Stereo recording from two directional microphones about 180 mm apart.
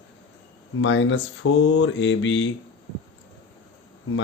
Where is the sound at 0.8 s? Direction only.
90° left.